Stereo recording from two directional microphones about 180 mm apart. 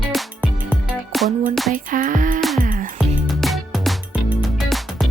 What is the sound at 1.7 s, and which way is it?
Music, 50° right (ahead or behind).